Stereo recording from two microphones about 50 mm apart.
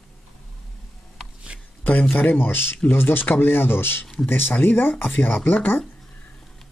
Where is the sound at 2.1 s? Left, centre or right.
Left.